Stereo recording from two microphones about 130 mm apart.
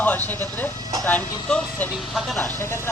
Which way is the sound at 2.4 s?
15° left (ahead or behind).